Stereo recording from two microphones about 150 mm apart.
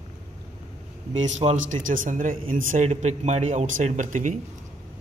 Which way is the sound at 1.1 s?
50° right (ahead or behind).